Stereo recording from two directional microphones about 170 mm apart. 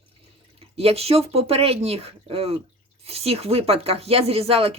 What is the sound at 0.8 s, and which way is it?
Speech, 35° right (ahead or behind).